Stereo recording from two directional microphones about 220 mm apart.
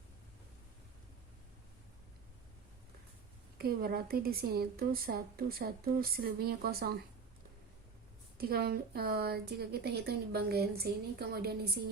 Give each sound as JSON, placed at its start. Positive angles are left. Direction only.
{"t": 3.6, "sound": "a woman's voice", "side_deg": -45}
{"t": 8.4, "sound": "a woman's voice", "side_deg": -45}